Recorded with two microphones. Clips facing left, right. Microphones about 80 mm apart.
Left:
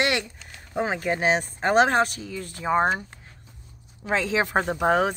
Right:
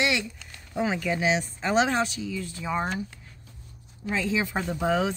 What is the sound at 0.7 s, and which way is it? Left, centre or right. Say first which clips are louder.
Speech: left 1 dB; left.